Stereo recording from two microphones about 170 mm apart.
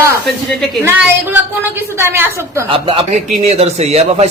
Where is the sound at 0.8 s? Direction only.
15° right (ahead or behind).